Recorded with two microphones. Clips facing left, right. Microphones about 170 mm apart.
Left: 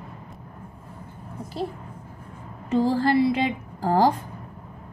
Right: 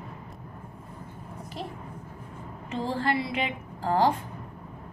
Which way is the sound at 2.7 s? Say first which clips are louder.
Left 8 dB; 35° left (ahead or behind).